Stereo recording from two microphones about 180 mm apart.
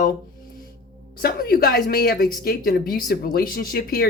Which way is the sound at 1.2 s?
55° left (ahead or behind).